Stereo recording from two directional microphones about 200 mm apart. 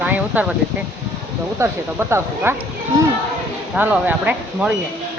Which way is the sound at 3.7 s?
5° right (ahead or behind).